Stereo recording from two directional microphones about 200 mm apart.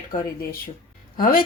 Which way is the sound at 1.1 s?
45° left (ahead or behind).